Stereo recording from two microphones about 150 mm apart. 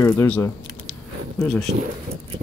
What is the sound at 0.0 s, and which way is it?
Speech, 15° left (ahead or behind).